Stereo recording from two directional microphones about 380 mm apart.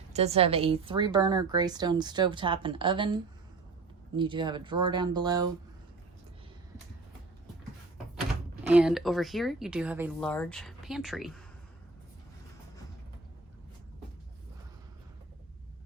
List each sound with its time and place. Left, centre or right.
0.1 s a woman's voice: centre
8.6 s speech: centre